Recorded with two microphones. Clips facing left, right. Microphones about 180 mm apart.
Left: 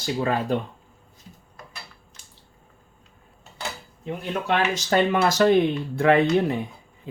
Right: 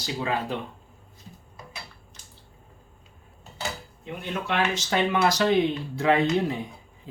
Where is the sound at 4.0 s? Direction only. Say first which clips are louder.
Left 4 dB; 45° left (ahead or behind).